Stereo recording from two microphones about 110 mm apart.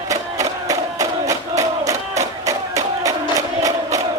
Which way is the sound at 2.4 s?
30° right (ahead or behind).